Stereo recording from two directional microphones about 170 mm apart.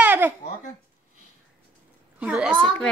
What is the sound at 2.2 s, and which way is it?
Speech, 5° right (ahead or behind).